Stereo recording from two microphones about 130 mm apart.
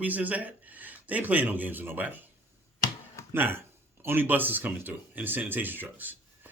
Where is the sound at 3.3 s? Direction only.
15° right (ahead or behind).